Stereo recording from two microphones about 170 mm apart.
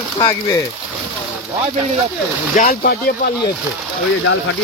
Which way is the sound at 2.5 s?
60° left (ahead or behind).